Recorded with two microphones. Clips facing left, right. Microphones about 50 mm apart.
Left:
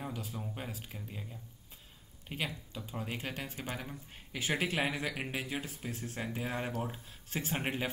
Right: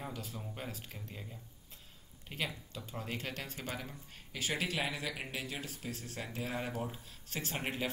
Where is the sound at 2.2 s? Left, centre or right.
Centre.